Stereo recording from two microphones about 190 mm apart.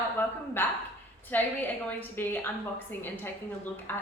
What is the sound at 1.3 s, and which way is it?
A woman's voice, 10° left (ahead or behind).